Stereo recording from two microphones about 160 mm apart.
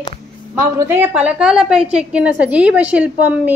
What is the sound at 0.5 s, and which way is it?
A woman's voice, 15° right (ahead or behind).